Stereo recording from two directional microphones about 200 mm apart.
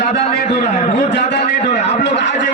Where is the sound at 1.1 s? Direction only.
60° left (ahead or behind).